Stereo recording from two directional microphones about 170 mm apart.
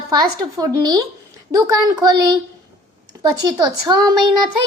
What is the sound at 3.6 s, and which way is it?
Speech, 25° right (ahead or behind).